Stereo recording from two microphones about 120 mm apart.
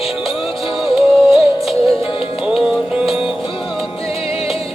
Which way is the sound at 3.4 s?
45° left (ahead or behind).